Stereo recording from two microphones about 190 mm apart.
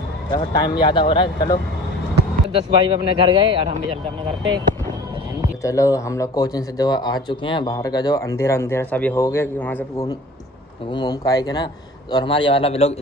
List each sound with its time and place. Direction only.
0.3 s a man's voice: 20° left (ahead or behind)
2.5 s speech: 25° right (ahead or behind)
5.6 s a man's voice: 15° left (ahead or behind)